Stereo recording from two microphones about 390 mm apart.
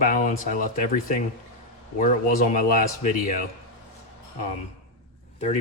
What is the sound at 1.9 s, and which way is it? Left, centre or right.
Speech, left.